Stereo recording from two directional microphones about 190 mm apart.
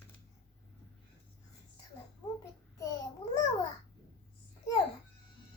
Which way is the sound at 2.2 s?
15° left (ahead or behind).